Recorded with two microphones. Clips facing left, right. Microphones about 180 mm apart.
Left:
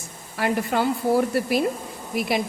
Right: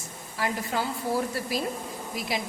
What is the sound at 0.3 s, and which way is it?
Speech, 65° left (ahead or behind).